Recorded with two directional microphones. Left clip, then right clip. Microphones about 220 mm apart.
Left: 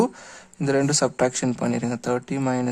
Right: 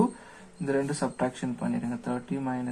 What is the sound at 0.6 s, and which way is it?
Speech, 55° left (ahead or behind).